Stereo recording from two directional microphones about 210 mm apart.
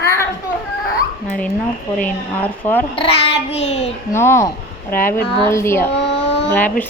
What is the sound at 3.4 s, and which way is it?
Child singing, 30° left (ahead or behind).